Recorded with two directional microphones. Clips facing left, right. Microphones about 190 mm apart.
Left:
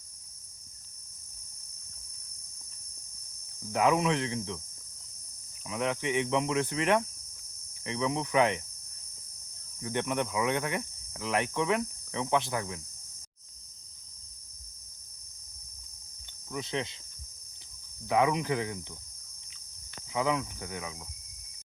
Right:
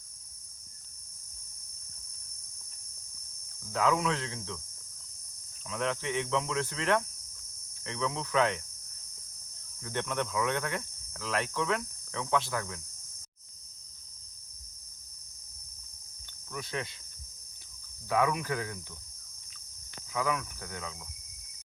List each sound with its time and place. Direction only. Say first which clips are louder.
3.7 s speech: left 3 dB; 20° left (ahead or behind)
5.6 s cricket: left 2 dB; 15° left (ahead or behind)
9.8 s cricket: left 3 dB; 15° left (ahead or behind)
16.5 s speech: left 3 dB; 20° left (ahead or behind)
18.1 s speech: left 2 dB; 20° left (ahead or behind)
20.1 s speech: left 3 dB; 20° left (ahead or behind)